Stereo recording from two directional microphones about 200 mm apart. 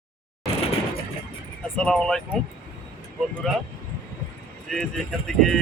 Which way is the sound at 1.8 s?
5° left (ahead or behind).